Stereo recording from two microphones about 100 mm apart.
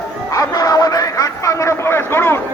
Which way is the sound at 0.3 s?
40° left (ahead or behind).